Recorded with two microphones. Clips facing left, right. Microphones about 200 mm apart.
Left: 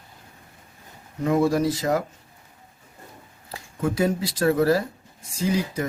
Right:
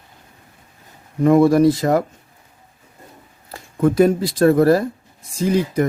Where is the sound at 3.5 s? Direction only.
55° right (ahead or behind).